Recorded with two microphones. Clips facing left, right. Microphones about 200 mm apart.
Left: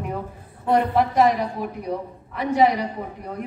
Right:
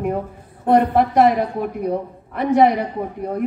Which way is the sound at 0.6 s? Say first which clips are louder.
Right 4 dB; 55° right (ahead or behind).